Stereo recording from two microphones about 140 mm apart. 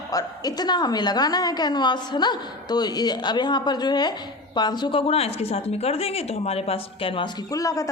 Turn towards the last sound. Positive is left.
turn(degrees=25)  # may be behind; listen again after turning